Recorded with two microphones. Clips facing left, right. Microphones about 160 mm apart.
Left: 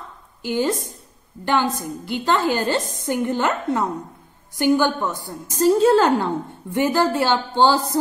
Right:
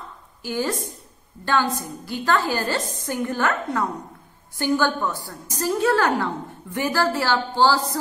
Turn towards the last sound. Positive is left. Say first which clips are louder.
# left 2 dB
turn(degrees=25)  # may be behind; listen again after turning